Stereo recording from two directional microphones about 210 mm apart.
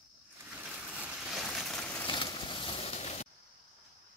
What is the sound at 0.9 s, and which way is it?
Vehicle, 5° right (ahead or behind).